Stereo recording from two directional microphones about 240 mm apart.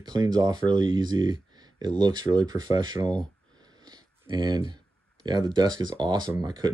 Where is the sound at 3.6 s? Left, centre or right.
Centre.